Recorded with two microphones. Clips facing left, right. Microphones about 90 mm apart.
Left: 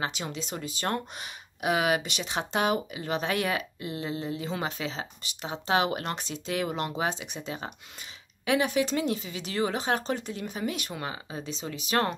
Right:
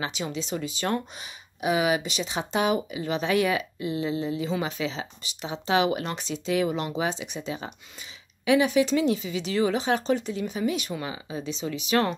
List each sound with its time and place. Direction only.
0.0 s speech: 50° left (ahead or behind)